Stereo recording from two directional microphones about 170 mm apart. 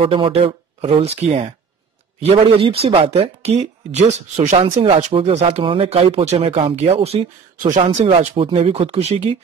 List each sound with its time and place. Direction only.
0.0 s speech: 30° right (ahead or behind)
7.5 s speech: 50° right (ahead or behind)
8.0 s speech: 35° right (ahead or behind)